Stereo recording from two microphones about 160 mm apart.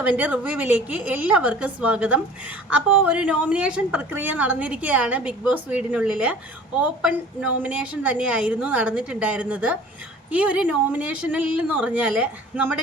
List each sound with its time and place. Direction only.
0.0 s a woman's voice: 10° right (ahead or behind)